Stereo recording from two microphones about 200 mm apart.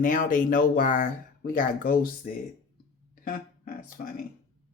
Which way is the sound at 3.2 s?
45° left (ahead or behind).